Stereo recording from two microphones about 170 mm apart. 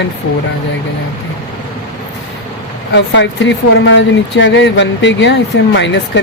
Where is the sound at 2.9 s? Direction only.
90° left.